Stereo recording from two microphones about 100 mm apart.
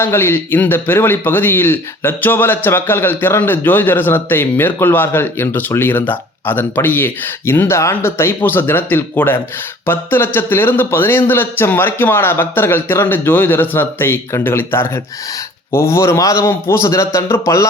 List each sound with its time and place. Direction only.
0.0 s a man's voice: 25° left (ahead or behind)